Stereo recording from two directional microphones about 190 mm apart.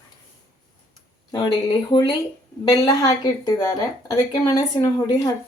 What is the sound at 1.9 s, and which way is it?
Speech, 25° left (ahead or behind).